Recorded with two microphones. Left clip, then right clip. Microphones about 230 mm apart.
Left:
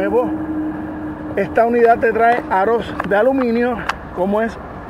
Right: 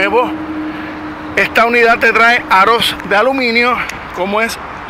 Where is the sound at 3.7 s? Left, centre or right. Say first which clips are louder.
Right 6 dB; right.